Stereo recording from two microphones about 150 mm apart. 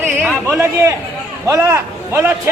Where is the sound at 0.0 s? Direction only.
10° right (ahead or behind).